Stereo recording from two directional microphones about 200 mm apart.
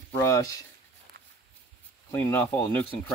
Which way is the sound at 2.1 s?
10° left (ahead or behind).